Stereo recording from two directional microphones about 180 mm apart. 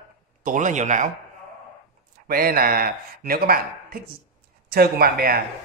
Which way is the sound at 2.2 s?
55° right (ahead or behind).